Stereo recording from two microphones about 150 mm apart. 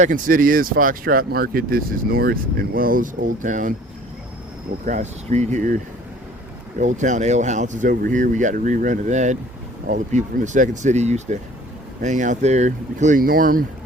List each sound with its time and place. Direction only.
0.0 s speech: 65° right (ahead or behind)
4.9 s speech: 55° right (ahead or behind); by 13.7 s 70° right (ahead or behind)